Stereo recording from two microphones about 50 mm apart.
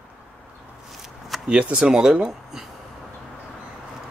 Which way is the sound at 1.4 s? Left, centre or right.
Right.